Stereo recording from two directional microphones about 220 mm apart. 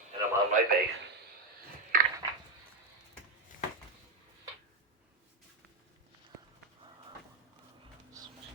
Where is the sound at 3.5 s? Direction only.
40° left (ahead or behind).